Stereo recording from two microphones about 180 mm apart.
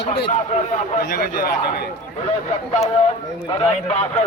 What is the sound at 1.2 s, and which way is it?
Speech, 60° left (ahead or behind).